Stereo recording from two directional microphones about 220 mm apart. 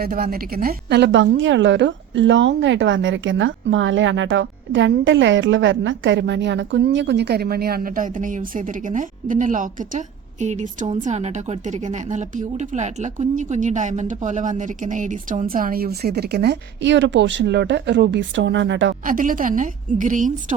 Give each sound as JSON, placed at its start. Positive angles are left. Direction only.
{"t": 0.0, "sound": "a woman's voice", "side_deg": -40}
{"t": 19.0, "sound": "speech", "side_deg": -40}